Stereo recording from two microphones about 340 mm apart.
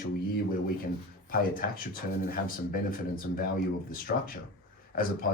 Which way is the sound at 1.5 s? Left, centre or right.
Left.